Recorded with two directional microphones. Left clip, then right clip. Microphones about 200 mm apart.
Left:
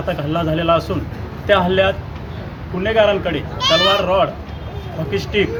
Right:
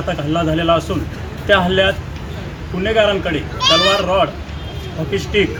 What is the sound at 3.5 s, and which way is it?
Speech, 50° left (ahead or behind).